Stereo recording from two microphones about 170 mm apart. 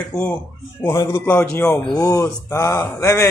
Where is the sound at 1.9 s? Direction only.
20° left (ahead or behind).